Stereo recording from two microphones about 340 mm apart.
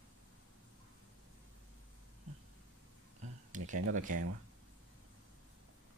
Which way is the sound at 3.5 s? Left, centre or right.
Right.